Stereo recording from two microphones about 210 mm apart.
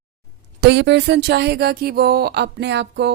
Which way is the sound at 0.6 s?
55° right (ahead or behind).